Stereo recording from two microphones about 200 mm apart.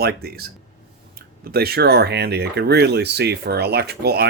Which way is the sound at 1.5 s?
50° right (ahead or behind).